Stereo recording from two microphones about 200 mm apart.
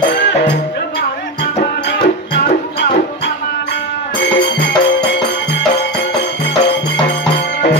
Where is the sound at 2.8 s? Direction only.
60° left (ahead or behind).